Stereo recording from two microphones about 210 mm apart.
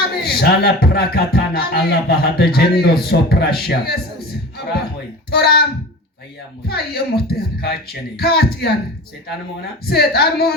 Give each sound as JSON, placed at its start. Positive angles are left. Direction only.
{"t": 0.2, "sound": "music", "side_deg": 50}
{"t": 5.3, "sound": "music", "side_deg": 50}
{"t": 6.7, "sound": "music", "side_deg": 50}
{"t": 9.8, "sound": "music", "side_deg": 50}